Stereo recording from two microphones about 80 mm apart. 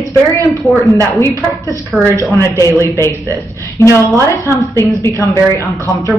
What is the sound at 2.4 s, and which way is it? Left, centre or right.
Speech, right.